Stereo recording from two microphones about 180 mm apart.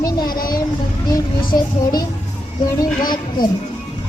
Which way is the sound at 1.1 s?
20° left (ahead or behind).